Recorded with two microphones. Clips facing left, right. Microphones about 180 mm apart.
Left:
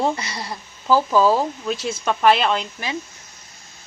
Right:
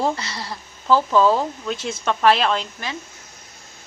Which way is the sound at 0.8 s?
5° left (ahead or behind).